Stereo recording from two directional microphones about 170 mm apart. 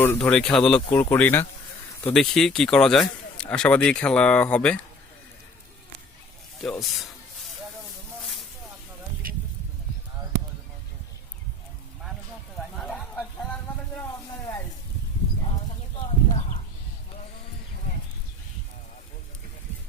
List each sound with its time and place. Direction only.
0.0 s a man's voice: 10° left (ahead or behind)
6.6 s a man's voice: centre (ahead or behind)
12.7 s a sound: 5° left (ahead or behind)